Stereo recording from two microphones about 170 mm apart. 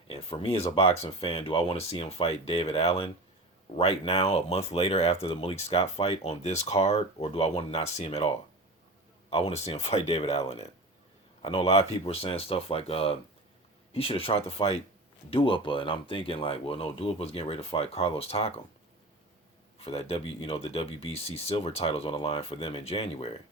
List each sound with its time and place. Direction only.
0.1 s speech: 35° left (ahead or behind)
19.8 s speech: 35° left (ahead or behind)